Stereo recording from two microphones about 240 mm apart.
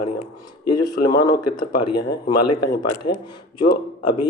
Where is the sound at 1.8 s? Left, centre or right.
Left.